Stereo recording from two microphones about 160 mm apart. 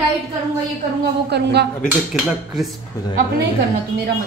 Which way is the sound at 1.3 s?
90° right.